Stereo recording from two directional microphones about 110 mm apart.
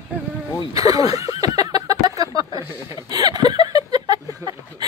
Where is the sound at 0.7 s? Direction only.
35° right (ahead or behind).